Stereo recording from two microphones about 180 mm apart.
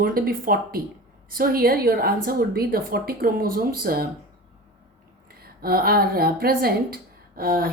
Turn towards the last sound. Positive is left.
turn(degrees=-55)  # may be behind; listen again after turning